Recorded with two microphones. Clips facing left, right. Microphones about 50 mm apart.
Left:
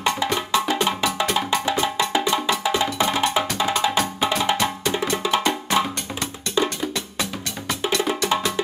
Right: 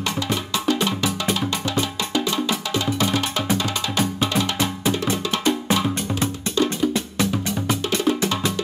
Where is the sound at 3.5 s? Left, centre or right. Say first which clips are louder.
Left 3 dB; centre.